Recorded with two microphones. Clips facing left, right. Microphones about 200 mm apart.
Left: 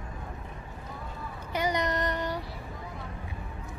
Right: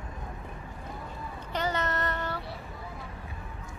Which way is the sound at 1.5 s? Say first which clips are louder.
Left 2 dB; 15° left (ahead or behind).